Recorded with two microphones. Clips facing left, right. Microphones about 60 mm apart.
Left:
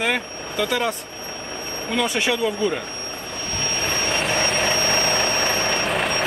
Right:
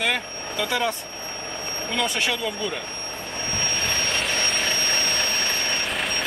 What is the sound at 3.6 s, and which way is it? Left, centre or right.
Vehicle, centre.